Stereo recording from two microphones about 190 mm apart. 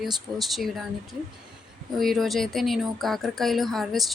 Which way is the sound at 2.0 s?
Centre (ahead or behind).